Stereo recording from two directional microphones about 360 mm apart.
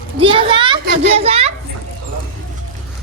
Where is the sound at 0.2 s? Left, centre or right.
Centre.